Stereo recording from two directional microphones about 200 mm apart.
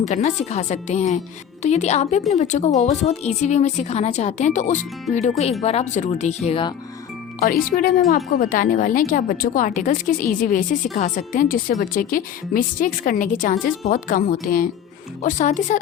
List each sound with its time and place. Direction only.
0.0 s speech: 35° left (ahead or behind)
7.3 s a woman's voice: 50° left (ahead or behind)